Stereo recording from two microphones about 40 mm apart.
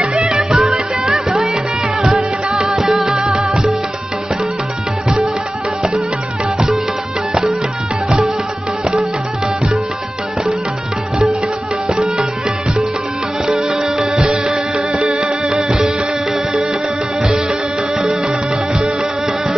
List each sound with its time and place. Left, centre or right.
0.0 s music: right
13.5 s music: centre